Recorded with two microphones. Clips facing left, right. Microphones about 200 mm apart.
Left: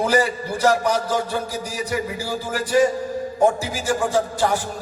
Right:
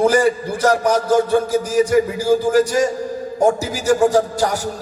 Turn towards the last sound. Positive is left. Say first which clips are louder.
# right 3 dB
turn(degrees=-40)  # may be behind; listen again after turning